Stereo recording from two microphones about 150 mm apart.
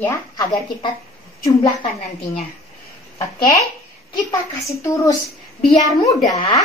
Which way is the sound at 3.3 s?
30° left (ahead or behind).